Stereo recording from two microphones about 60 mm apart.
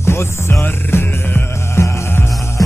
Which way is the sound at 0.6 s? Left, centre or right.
Left.